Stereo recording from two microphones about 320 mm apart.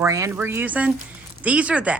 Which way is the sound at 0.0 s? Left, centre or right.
Centre.